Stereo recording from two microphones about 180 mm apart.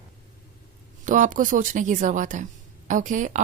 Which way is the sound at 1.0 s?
45° right (ahead or behind).